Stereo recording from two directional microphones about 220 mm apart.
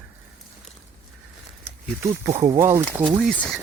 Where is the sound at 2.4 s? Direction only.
15° right (ahead or behind).